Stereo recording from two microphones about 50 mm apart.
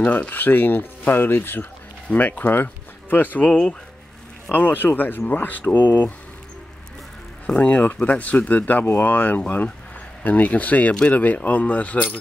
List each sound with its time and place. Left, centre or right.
0.0 s speech: left
3.4 s speech: centre
4.5 s speech: left
7.4 s speech: left